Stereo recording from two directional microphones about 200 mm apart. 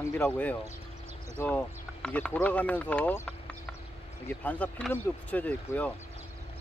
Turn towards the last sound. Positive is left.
turn(degrees=10)  # may be behind; listen again after turning